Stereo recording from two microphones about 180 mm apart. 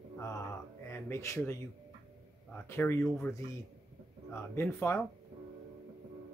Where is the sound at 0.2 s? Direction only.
15° left (ahead or behind).